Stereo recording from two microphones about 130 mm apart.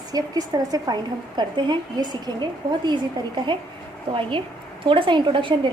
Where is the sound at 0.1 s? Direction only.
30° right (ahead or behind).